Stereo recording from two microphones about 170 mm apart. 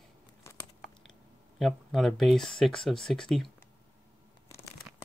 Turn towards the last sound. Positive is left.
turn(degrees=0)  # may be behind; listen again after turning